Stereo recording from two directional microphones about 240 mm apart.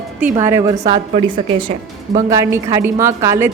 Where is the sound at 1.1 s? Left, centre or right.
Right.